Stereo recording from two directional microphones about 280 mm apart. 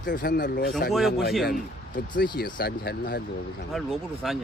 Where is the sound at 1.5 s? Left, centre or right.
Left.